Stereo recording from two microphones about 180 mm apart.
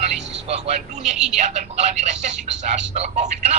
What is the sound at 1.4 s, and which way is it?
Speech, 40° right (ahead or behind).